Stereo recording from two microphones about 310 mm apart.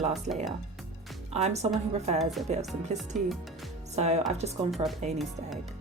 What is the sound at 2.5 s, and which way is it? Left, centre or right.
Speech, right.